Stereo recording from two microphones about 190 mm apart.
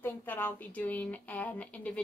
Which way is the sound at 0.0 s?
10° left (ahead or behind).